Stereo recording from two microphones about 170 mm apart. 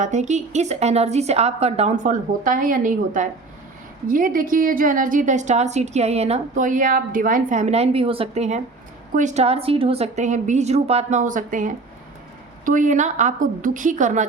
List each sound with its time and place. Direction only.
0.0 s a woman's voice: 45° right (ahead or behind)